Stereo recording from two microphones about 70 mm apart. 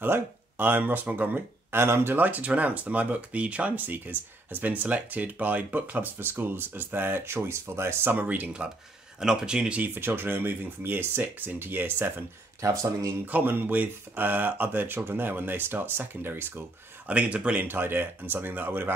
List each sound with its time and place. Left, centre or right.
0.0 s speech: right
9.2 s speech: centre
9.9 s speech: right
12.6 s speech: right
13.2 s speech: right
17.1 s speech: centre
17.6 s speech: right